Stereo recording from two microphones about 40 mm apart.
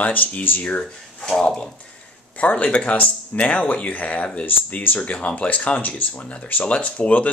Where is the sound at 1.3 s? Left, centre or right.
Centre.